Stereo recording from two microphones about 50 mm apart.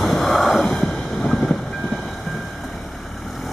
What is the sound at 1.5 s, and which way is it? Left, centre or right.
Train, centre.